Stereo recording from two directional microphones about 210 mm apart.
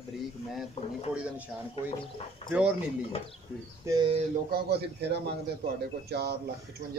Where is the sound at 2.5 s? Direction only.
5° right (ahead or behind).